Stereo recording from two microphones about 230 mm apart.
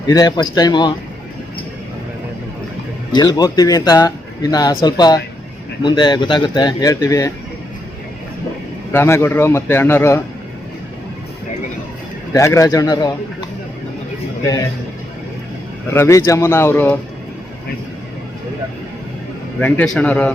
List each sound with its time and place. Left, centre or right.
0.1 s speech: centre
3.2 s speech: centre
8.9 s speech: centre
12.3 s speech: centre
15.9 s speech: centre
19.5 s a man's voice: centre